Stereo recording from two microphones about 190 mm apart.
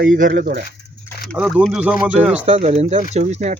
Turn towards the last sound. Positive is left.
turn(degrees=-35)  # may be behind; listen again after turning